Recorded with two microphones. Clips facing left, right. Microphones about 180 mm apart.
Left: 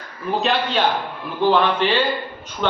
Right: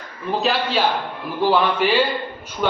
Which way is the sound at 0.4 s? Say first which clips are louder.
Even; 5° right (ahead or behind).